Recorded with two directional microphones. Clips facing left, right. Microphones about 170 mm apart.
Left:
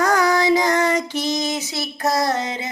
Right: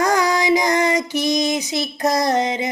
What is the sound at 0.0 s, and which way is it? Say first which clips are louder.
Child singing: even; 15° right (ahead or behind).